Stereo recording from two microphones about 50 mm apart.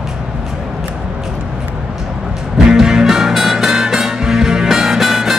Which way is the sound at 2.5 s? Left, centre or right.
Centre.